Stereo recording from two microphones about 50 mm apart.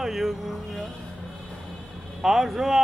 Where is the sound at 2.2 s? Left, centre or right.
Centre.